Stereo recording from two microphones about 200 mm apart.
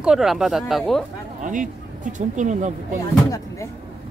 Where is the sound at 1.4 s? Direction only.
40° right (ahead or behind).